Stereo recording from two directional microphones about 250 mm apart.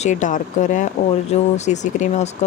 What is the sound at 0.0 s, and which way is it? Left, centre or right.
Speech, left.